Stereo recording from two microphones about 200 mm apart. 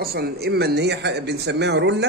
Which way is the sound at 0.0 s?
50° right (ahead or behind).